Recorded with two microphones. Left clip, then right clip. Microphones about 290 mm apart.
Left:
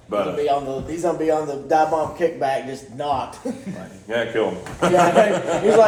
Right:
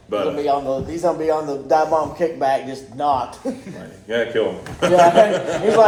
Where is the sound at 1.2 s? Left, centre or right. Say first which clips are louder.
Right 1 dB; centre.